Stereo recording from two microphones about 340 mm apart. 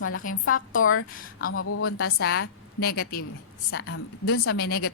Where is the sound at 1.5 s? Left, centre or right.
Left.